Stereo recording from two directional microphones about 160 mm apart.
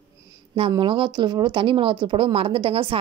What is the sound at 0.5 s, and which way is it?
Speech, 30° right (ahead or behind).